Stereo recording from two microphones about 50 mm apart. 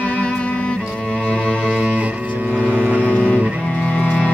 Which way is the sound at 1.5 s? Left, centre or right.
Right.